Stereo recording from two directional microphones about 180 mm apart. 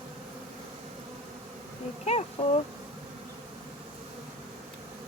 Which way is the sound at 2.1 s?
40° left (ahead or behind).